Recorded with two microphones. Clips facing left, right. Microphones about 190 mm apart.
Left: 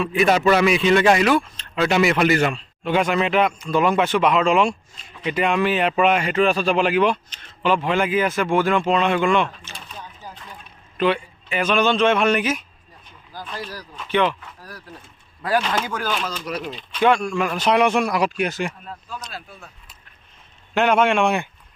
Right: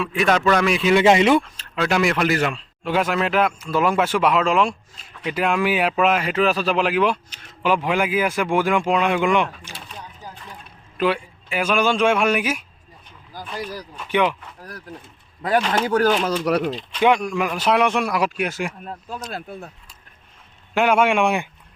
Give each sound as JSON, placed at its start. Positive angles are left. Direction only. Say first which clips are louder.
{"t": 0.0, "sound": "a man's voice", "louder": "left 2 dB", "side_deg": 0}
{"t": 0.9, "sound": "speech", "louder": "right 5 dB", "side_deg": -20}
{"t": 1.5, "sound": "a man's voice", "louder": "left 2 dB", "side_deg": -5}
{"t": 10.9, "sound": "a man's voice", "louder": "left 1 dB", "side_deg": -5}
{"t": 15.4, "sound": "speech", "louder": "right 1 dB", "side_deg": -20}
{"t": 15.9, "sound": "speech", "louder": "right 9 dB", "side_deg": -40}
{"t": 16.2, "sound": "speech", "louder": "right 8 dB", "side_deg": -65}
{"t": 17.0, "sound": "a man's voice", "louder": "even", "side_deg": -15}
{"t": 17.5, "sound": "a man's voice", "louder": "left 2 dB", "side_deg": 0}
{"t": 19.3, "sound": "speech", "louder": "right 6 dB", "side_deg": -55}
{"t": 20.7, "sound": "a man's voice", "louder": "even", "side_deg": -10}